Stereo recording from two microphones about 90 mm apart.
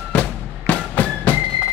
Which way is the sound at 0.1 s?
15° left (ahead or behind).